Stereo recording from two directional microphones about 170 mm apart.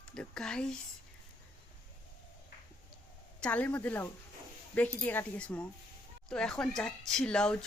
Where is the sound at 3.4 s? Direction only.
10° left (ahead or behind).